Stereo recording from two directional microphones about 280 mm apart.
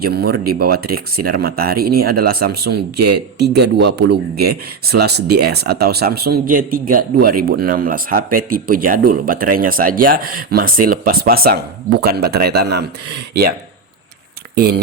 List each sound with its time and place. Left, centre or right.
0.0 s speech: right
3.0 s speech: right
3.3 s speech: right
14.5 s speech: right